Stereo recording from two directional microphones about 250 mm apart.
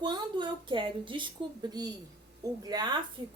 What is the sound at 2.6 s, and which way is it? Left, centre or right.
Speech, centre.